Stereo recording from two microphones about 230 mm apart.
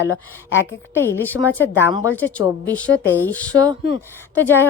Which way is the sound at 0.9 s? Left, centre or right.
Centre.